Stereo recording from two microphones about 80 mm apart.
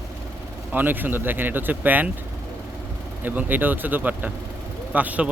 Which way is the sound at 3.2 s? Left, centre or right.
Right.